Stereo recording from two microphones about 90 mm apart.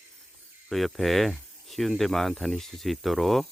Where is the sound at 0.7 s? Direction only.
Centre (ahead or behind).